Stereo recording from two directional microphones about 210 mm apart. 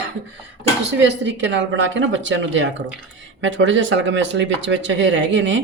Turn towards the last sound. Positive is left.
turn(degrees=-60)  # may be behind; listen again after turning